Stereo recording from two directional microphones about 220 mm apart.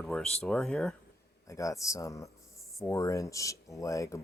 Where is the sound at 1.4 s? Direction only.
15° left (ahead or behind).